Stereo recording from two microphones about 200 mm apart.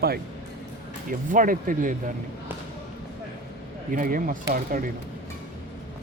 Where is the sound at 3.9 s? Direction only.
45° right (ahead or behind).